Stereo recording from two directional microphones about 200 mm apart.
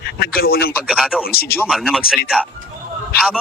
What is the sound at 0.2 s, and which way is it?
Speech, 50° left (ahead or behind).